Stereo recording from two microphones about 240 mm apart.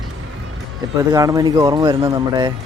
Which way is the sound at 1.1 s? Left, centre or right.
Centre.